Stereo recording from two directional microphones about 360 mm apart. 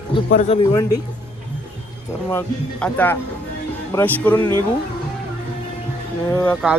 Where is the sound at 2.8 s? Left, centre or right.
Centre.